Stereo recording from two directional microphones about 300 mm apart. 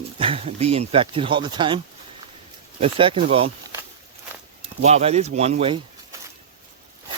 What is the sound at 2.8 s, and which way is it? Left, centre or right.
Speech, centre.